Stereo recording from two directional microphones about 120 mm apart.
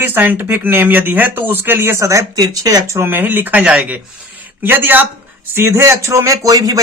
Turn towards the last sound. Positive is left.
turn(degrees=-30)  # may be behind; listen again after turning